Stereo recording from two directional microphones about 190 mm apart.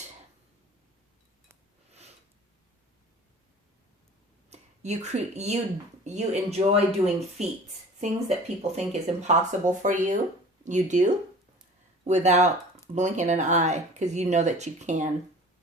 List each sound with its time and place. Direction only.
4.4 s speech: 35° right (ahead or behind)